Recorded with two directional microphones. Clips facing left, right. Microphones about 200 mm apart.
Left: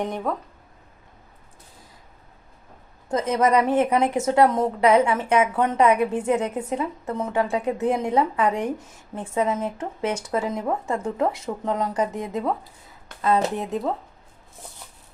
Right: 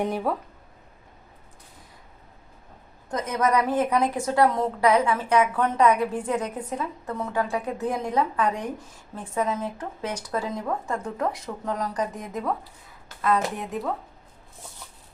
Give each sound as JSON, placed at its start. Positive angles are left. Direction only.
{"t": 0.0, "sound": "speech", "side_deg": -5}
{"t": 3.1, "sound": "a woman's voice", "side_deg": 30}